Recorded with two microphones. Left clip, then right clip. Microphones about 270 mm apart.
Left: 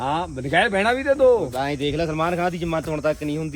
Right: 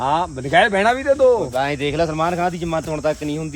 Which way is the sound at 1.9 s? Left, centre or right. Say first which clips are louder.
Right 4 dB; centre.